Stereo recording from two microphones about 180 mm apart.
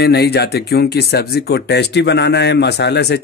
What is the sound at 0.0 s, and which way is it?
Speech, 65° left (ahead or behind).